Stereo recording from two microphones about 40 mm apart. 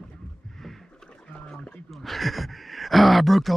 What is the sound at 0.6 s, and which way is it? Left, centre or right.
Rowboat, centre.